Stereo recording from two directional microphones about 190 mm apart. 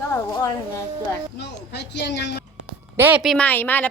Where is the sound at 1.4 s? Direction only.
65° left (ahead or behind).